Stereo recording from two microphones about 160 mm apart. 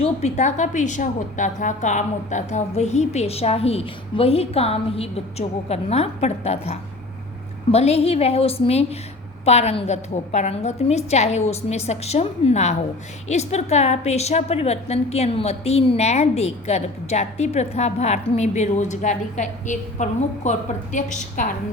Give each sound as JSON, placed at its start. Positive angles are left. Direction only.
{"t": 0.0, "sound": "a woman's voice", "side_deg": 45}